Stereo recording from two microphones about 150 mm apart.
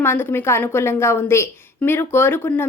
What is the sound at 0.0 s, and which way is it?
A woman's voice, 15° left (ahead or behind).